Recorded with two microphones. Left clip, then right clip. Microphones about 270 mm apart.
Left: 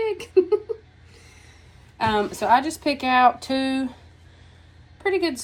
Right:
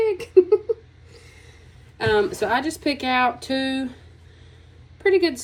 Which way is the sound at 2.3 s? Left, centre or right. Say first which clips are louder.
Left 3 dB; centre.